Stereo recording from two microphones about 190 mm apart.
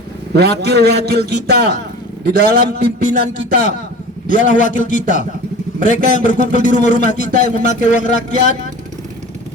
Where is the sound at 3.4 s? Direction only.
40° left (ahead or behind).